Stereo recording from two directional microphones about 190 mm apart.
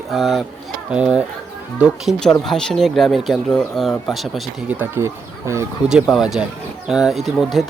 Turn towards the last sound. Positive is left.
turn(degrees=0)  # may be behind; listen again after turning